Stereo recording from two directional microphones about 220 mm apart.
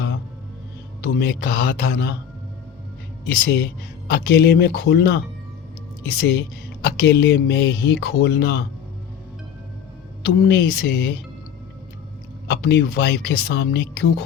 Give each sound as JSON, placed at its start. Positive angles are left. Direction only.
{"t": 1.0, "sound": "speech", "side_deg": 45}
{"t": 3.2, "sound": "speech", "side_deg": 45}
{"t": 10.2, "sound": "speech", "side_deg": 45}
{"t": 12.5, "sound": "speech", "side_deg": 45}